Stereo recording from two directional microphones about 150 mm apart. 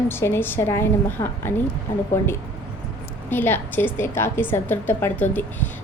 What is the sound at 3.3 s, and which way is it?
A woman's voice, 15° left (ahead or behind).